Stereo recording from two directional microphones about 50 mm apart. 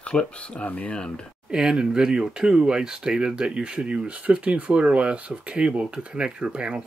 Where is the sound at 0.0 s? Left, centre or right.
Left.